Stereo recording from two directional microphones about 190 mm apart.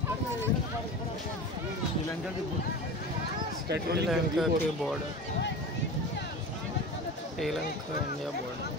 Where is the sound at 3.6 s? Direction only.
60° right (ahead or behind).